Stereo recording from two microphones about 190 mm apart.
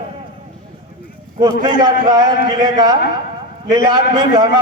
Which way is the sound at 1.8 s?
20° right (ahead or behind).